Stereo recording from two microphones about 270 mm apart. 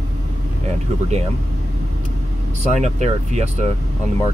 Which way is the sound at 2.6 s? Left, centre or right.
Right.